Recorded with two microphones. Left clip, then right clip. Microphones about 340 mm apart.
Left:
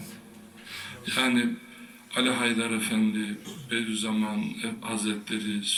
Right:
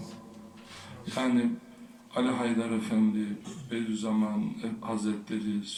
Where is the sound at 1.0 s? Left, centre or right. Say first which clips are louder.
Left 4 dB; centre.